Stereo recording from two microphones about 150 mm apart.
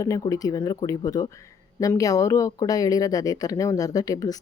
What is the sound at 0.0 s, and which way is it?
Speech, 25° left (ahead or behind).